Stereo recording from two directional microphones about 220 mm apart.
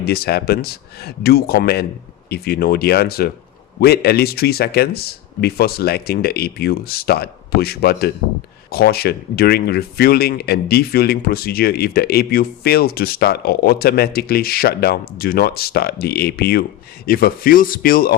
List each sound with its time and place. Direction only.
0.0 s speech: 45° left (ahead or behind)